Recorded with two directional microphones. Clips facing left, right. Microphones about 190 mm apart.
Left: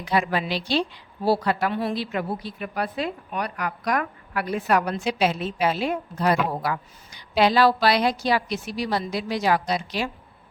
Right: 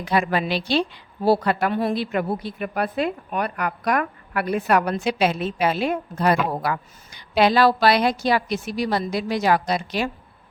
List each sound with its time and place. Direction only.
0.0 s a woman's voice: 55° right (ahead or behind)